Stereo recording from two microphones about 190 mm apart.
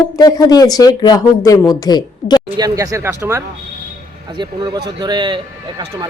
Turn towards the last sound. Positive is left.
turn(degrees=-25)  # may be behind; listen again after turning